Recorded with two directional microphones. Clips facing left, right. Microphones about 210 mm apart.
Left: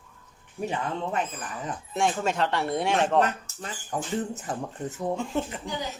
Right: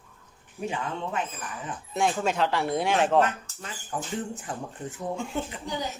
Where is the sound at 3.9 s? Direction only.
40° left (ahead or behind).